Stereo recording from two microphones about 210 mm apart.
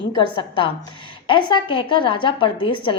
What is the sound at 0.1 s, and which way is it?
A woman's voice, 20° left (ahead or behind).